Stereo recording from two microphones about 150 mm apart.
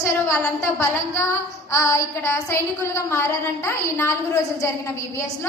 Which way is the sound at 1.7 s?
20° left (ahead or behind).